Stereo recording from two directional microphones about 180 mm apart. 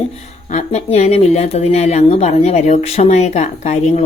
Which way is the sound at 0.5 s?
40° left (ahead or behind).